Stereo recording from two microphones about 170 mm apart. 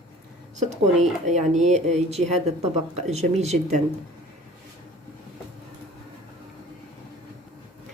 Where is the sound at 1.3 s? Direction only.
40° right (ahead or behind).